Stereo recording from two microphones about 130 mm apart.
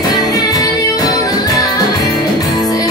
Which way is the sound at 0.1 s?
30° left (ahead or behind).